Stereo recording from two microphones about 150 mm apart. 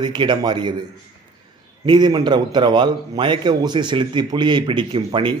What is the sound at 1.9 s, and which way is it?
A man's voice, 30° right (ahead or behind).